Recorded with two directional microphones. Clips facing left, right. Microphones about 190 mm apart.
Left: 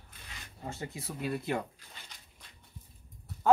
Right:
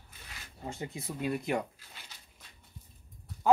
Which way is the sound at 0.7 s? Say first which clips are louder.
Right 1 dB; 20° right (ahead or behind).